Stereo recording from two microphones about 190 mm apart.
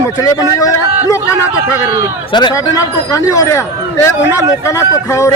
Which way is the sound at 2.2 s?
25° left (ahead or behind).